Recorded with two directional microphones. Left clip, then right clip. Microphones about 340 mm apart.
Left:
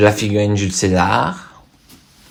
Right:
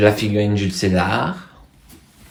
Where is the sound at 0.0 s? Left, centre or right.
Centre.